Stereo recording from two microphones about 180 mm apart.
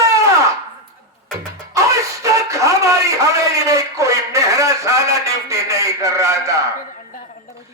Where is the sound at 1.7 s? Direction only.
15° right (ahead or behind).